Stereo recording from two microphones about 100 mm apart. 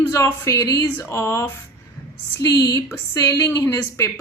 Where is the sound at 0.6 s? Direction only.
40° left (ahead or behind).